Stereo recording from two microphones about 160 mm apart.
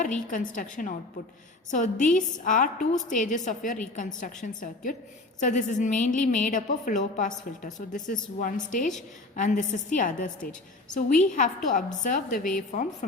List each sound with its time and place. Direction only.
0.0 s a woman's voice: 55° left (ahead or behind)